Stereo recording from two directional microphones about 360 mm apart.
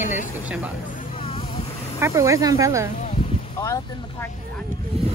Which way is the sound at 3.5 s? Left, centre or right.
Centre.